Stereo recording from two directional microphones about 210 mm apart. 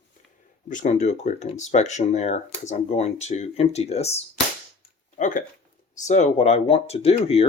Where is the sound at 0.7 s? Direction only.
35° left (ahead or behind).